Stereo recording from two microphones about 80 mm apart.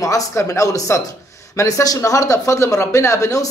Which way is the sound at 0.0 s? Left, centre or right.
Left.